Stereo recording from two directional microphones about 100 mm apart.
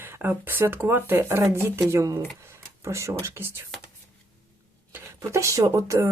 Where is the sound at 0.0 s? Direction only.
20° right (ahead or behind).